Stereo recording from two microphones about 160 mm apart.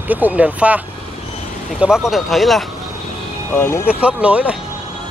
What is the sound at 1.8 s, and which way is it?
Speech, 5° right (ahead or behind).